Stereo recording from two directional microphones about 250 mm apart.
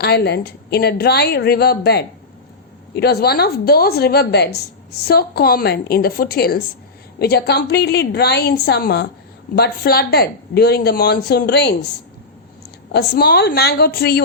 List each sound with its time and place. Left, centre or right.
0.0 s speech: left
12.9 s speech: left